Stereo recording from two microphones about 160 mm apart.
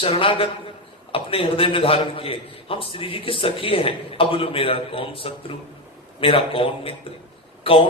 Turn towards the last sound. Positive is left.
turn(degrees=35)  # may be behind; listen again after turning